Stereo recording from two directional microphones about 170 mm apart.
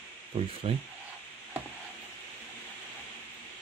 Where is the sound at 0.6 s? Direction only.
35° right (ahead or behind).